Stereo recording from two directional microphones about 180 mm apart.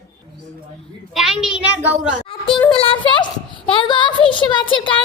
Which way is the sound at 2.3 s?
30° left (ahead or behind).